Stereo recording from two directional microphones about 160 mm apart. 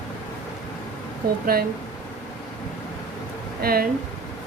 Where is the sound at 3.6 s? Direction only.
70° right (ahead or behind).